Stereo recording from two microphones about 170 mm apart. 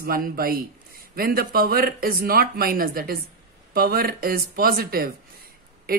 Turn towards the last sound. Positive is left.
turn(degrees=-60)  # may be behind; listen again after turning